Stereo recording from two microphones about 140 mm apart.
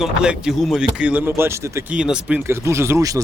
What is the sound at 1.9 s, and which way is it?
Speech, 5° right (ahead or behind).